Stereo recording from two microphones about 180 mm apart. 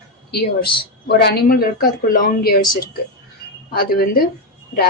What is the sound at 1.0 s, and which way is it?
Speech, 60° left (ahead or behind).